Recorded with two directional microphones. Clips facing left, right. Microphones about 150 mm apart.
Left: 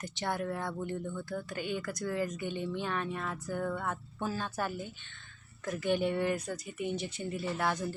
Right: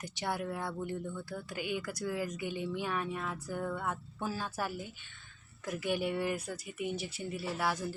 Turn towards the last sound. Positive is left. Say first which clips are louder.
# left 2 dB
turn(degrees=-5)  # may be behind; listen again after turning